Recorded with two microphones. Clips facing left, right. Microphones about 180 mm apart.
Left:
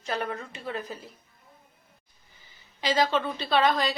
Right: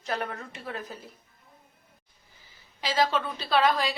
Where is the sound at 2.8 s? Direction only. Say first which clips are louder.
Left 1 dB; 5° right (ahead or behind).